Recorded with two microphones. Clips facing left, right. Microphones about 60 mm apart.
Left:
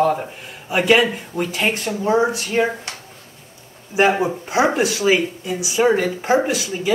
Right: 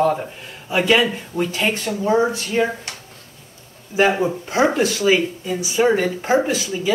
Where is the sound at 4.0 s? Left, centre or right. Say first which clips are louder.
Left 1 dB; centre.